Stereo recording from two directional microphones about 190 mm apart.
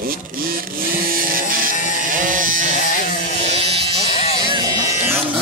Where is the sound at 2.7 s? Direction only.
45° left (ahead or behind).